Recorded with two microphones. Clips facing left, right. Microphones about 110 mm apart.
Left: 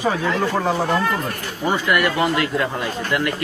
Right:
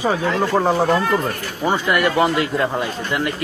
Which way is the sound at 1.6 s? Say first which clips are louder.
Right 1 dB; 25° right (ahead or behind).